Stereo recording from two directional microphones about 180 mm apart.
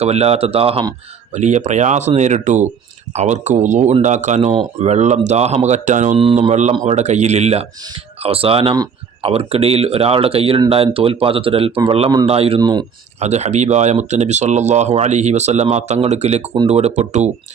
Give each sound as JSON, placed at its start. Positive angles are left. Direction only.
{"t": 0.0, "sound": "speech", "side_deg": -35}
{"t": 13.1, "sound": "speech", "side_deg": -40}